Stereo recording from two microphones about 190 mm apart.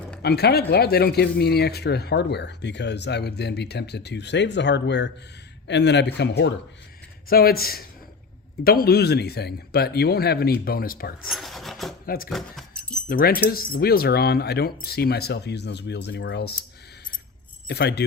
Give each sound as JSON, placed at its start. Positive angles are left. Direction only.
{"t": 0.2, "sound": "speech", "side_deg": 60}
{"t": 7.3, "sound": "speech", "side_deg": 55}
{"t": 11.3, "sound": "speech", "side_deg": 0}
{"t": 12.0, "sound": "speech", "side_deg": 50}
{"t": 12.3, "sound": "keys jangling", "side_deg": 5}
{"t": 13.1, "sound": "speech", "side_deg": 50}
{"t": 17.7, "sound": "speech", "side_deg": 60}